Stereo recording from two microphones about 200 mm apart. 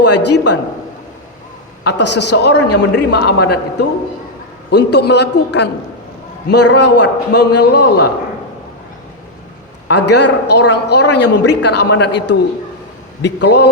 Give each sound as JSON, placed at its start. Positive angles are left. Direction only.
{"t": 0.0, "sound": "a woman's voice", "side_deg": 60}
{"t": 1.8, "sound": "a woman's voice", "side_deg": 60}
{"t": 9.9, "sound": "a woman's voice", "side_deg": 60}